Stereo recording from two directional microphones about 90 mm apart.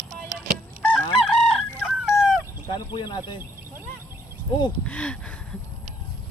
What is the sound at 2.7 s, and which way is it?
Speech, 55° left (ahead or behind).